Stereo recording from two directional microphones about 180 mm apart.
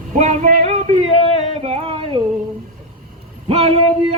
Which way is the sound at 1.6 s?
35° right (ahead or behind).